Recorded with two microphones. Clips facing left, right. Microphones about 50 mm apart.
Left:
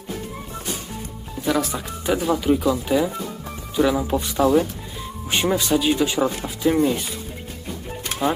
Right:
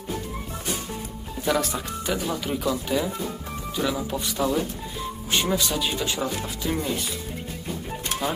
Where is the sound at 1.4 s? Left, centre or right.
Centre.